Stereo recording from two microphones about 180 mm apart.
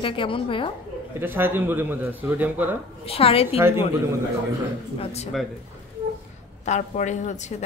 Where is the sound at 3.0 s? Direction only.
30° left (ahead or behind).